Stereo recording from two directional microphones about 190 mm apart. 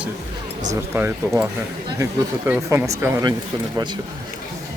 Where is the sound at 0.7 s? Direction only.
10° right (ahead or behind).